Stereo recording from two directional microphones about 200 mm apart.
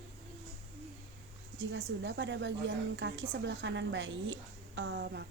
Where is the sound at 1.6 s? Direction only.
65° right (ahead or behind).